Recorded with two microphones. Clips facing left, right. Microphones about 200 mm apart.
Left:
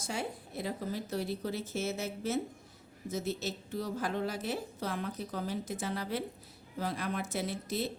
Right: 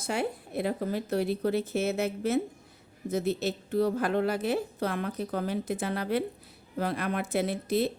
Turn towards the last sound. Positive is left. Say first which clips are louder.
# right 7 dB
turn(degrees=-60)  # may be behind; listen again after turning